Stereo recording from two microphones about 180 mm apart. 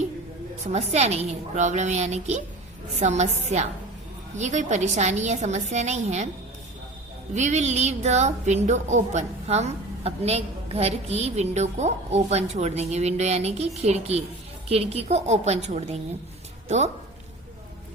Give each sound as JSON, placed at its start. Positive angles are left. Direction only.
{"t": 0.6, "sound": "a woman's voice", "side_deg": -35}
{"t": 7.3, "sound": "a woman's voice", "side_deg": -40}